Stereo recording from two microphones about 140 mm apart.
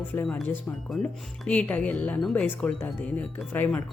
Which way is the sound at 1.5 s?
10° left (ahead or behind).